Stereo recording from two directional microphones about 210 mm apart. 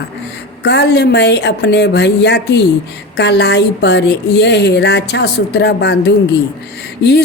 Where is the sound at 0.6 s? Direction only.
50° left (ahead or behind).